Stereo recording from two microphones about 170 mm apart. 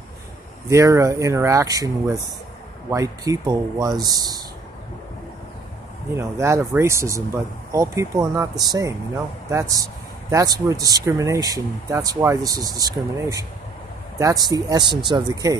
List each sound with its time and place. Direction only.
0.7 s speech: 20° right (ahead or behind)
6.1 s speech: 15° right (ahead or behind)